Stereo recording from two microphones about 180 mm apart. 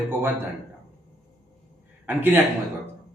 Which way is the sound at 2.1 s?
10° right (ahead or behind).